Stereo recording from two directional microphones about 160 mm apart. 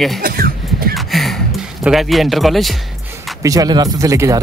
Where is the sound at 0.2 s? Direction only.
65° right (ahead or behind).